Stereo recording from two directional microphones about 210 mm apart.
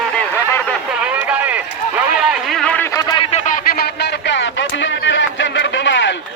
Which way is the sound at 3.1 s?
30° left (ahead or behind).